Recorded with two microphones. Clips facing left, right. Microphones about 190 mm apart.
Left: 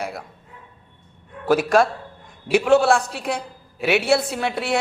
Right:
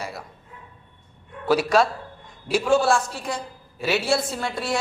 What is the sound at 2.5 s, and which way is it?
A woman's voice, 65° left (ahead or behind).